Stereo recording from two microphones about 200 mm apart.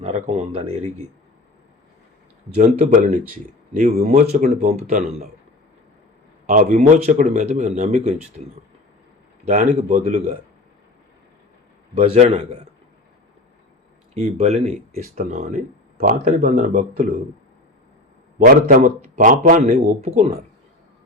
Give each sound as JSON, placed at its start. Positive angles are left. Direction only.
{"t": 0.0, "sound": "speech", "side_deg": -35}
{"t": 2.6, "sound": "speech", "side_deg": -40}
{"t": 6.5, "sound": "speech", "side_deg": -40}
{"t": 9.4, "sound": "speech", "side_deg": -35}
{"t": 11.9, "sound": "speech", "side_deg": -35}
{"t": 14.1, "sound": "speech", "side_deg": -35}
{"t": 18.3, "sound": "speech", "side_deg": -45}